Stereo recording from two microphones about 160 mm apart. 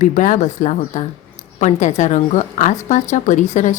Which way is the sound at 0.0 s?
55° left (ahead or behind).